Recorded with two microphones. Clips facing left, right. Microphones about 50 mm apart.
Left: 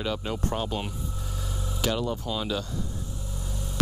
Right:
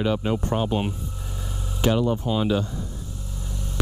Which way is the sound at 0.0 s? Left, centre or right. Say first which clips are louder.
Right 6 dB; centre.